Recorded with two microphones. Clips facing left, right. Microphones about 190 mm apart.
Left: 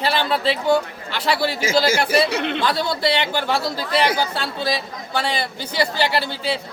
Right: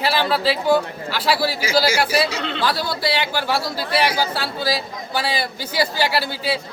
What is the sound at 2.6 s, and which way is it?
Speech, 5° right (ahead or behind).